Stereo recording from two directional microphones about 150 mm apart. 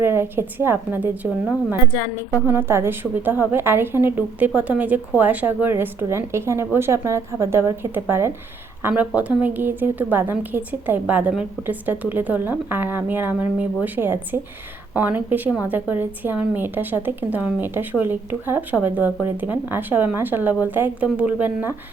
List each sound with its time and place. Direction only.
0.0 s a woman's voice: 15° right (ahead or behind)